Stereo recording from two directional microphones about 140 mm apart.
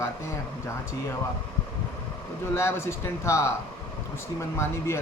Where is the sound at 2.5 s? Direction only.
20° left (ahead or behind).